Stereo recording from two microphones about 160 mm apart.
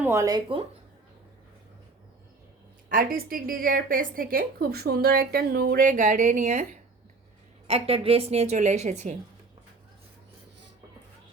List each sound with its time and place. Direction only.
0.0 s speech: 15° right (ahead or behind)
2.9 s a woman's voice: 65° right (ahead or behind)
7.7 s a woman's voice: 35° right (ahead or behind)